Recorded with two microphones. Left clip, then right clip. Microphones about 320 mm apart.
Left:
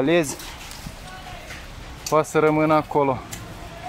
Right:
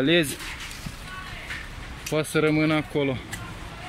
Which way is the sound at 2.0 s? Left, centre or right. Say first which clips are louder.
Left 5 dB; left.